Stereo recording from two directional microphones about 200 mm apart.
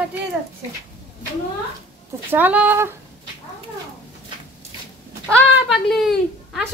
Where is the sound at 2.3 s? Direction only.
10° right (ahead or behind).